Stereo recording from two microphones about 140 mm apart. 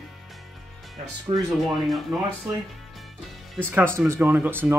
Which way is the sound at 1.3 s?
45° right (ahead or behind).